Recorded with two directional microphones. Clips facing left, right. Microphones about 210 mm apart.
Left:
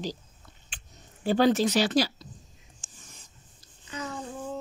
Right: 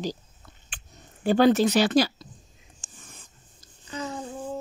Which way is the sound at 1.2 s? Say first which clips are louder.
Right 3 dB; 55° right (ahead or behind).